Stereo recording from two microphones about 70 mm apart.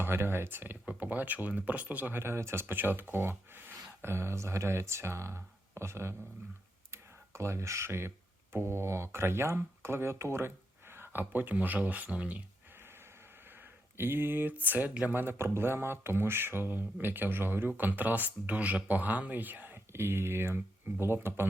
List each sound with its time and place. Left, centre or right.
0.0 s speech: right
13.9 s speech: right